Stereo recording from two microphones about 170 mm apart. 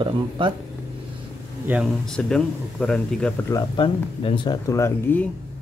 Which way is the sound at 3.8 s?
30° left (ahead or behind).